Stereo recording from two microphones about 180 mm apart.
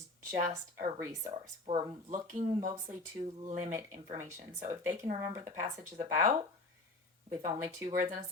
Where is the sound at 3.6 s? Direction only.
20° right (ahead or behind).